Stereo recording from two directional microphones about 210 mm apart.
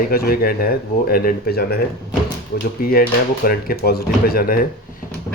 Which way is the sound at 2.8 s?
45° left (ahead or behind).